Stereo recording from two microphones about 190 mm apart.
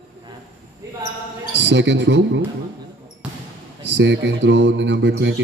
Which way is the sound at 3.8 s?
70° right (ahead or behind).